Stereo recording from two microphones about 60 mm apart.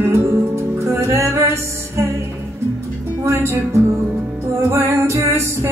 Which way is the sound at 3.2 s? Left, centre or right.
Right.